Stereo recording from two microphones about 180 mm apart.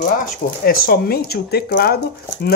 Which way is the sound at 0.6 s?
55° left (ahead or behind).